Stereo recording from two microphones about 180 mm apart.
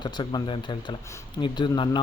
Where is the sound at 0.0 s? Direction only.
25° left (ahead or behind).